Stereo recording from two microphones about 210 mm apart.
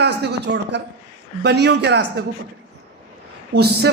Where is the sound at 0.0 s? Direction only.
50° right (ahead or behind).